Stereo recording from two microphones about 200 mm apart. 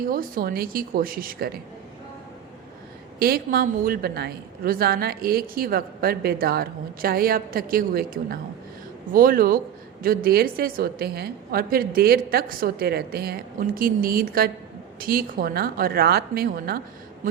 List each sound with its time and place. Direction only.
0.0 s a woman's voice: 45° right (ahead or behind)
3.2 s a woman's voice: 50° right (ahead or behind)